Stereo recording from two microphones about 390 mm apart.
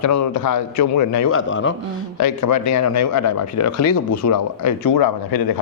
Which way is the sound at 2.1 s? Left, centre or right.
Left.